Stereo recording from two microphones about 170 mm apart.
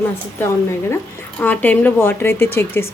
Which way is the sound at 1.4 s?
10° left (ahead or behind).